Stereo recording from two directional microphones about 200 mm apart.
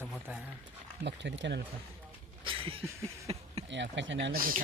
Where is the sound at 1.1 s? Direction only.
60° right (ahead or behind).